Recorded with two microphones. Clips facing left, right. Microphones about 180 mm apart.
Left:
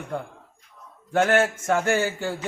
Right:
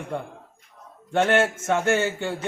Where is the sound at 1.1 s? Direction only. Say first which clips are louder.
Even; 5° left (ahead or behind).